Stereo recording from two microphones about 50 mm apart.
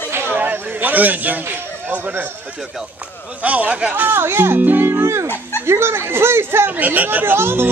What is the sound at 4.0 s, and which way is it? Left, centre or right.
Speech, right.